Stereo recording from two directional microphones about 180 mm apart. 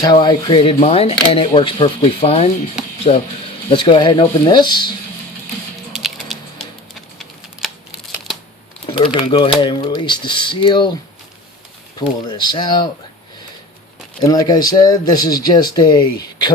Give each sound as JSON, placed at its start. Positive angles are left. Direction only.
{"t": 0.0, "sound": "speech", "side_deg": 25}
{"t": 0.8, "sound": "speech", "side_deg": 35}
{"t": 2.8, "sound": "music", "side_deg": -5}
{"t": 3.7, "sound": "speech", "side_deg": 25}
{"t": 5.9, "sound": "music", "side_deg": 0}
{"t": 8.9, "sound": "speech", "side_deg": 25}
{"t": 11.9, "sound": "speech", "side_deg": 25}
{"t": 14.2, "sound": "speech", "side_deg": 20}